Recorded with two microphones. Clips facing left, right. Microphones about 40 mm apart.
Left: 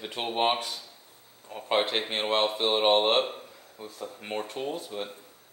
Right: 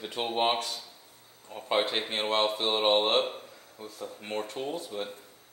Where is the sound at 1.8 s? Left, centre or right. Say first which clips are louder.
Left 1 dB; centre.